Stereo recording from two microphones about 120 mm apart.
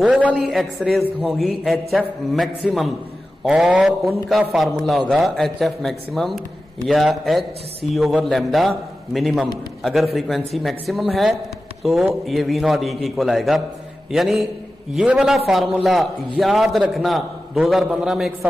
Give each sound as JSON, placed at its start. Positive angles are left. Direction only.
{"t": 0.0, "sound": "a man's voice", "side_deg": -10}